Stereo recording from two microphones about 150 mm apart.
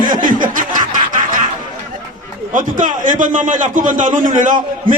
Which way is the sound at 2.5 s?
60° right (ahead or behind).